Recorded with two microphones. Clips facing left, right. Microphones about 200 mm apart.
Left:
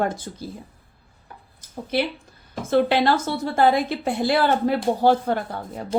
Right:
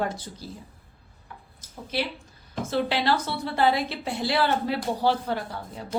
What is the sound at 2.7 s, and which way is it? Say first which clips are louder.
A woman's voice: left 6 dB; 55° left (ahead or behind).